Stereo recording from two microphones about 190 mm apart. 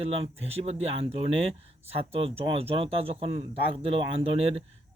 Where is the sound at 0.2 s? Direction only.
30° right (ahead or behind).